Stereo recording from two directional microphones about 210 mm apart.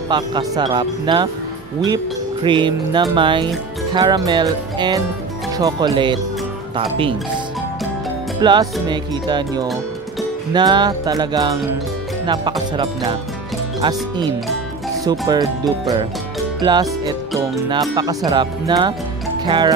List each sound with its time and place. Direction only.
0.1 s speech: 20° right (ahead or behind)
2.4 s speech: 20° right (ahead or behind)
8.4 s music: 20° right (ahead or behind)
8.8 s speech: 20° right (ahead or behind)
17.4 s speech: 20° right (ahead or behind)